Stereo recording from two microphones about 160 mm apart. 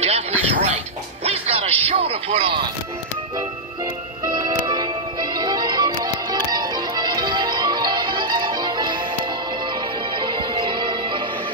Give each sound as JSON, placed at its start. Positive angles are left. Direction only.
{"t": 0.0, "sound": "a sound", "side_deg": -40}
{"t": 1.2, "sound": "music", "side_deg": -40}
{"t": 4.2, "sound": "music", "side_deg": -25}
{"t": 10.1, "sound": "music", "side_deg": -30}